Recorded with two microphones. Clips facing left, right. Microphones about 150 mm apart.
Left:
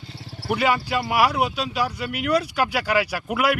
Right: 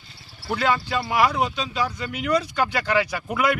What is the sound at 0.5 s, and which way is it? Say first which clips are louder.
A man's voice: left 1 dB; 10° left (ahead or behind).